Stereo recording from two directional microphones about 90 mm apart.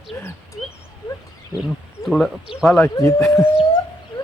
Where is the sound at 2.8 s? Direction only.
35° left (ahead or behind).